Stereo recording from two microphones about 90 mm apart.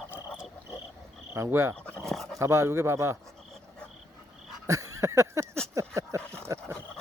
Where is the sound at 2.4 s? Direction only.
30° right (ahead or behind).